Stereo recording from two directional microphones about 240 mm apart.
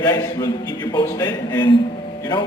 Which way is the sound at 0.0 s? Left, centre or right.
Centre.